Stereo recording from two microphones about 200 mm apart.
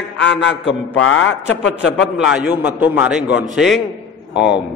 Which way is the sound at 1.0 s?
80° left.